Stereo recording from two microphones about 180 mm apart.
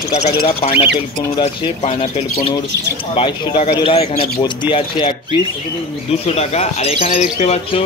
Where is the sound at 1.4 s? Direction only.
40° left (ahead or behind).